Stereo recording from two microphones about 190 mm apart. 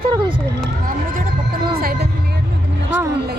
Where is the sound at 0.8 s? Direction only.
45° right (ahead or behind).